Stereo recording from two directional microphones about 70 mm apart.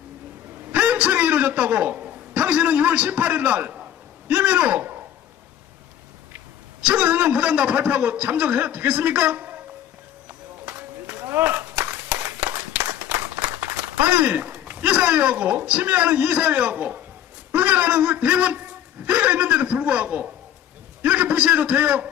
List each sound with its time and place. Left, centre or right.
0.7 s a sound: centre
4.3 s a man's voice: centre
6.8 s speech: centre
10.2 s a sound: right
11.8 s run: right
14.0 s speech: right